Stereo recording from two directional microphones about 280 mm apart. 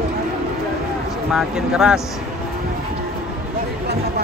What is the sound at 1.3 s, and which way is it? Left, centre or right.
Speech, centre.